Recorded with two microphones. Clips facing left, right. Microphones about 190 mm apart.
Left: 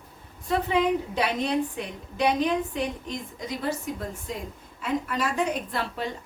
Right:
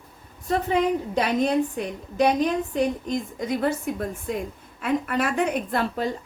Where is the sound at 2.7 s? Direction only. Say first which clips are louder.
Right 6 dB; 50° right (ahead or behind).